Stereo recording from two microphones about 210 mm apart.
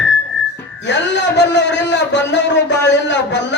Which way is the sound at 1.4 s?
55° left (ahead or behind).